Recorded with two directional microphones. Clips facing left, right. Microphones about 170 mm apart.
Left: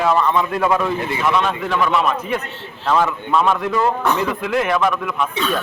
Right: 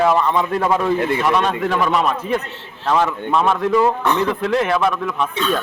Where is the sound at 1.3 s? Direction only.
40° right (ahead or behind).